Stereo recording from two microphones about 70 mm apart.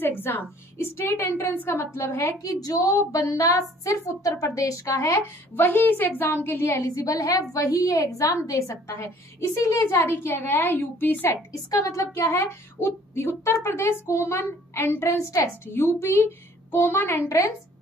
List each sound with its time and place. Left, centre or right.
0.0 s speech: left
2.4 s a woman's voice: left
5.6 s a woman's voice: left
6.8 s a woman's voice: left
9.9 s speech: left
11.7 s speech: left